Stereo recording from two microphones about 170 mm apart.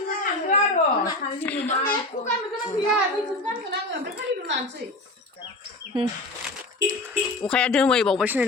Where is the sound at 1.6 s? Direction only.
50° left (ahead or behind).